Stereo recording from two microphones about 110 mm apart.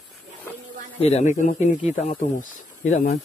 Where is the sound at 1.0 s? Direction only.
75° left (ahead or behind).